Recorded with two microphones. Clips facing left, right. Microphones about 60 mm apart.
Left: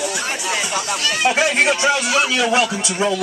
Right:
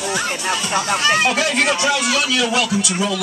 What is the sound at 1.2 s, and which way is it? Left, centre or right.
Speech, left.